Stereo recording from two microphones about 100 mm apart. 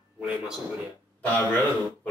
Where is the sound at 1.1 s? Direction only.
15° left (ahead or behind).